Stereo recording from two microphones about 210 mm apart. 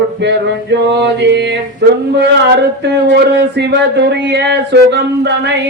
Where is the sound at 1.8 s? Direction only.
55° right (ahead or behind).